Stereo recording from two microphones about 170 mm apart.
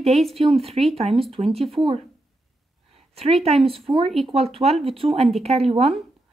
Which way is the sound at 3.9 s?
25° right (ahead or behind).